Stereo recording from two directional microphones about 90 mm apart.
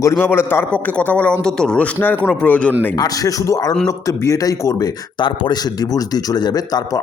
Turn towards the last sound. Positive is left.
turn(degrees=45)  # may be behind; listen again after turning